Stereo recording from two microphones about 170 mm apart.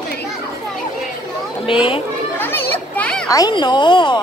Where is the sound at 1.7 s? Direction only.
30° left (ahead or behind).